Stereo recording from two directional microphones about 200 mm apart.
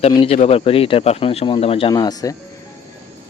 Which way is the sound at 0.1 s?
30° left (ahead or behind).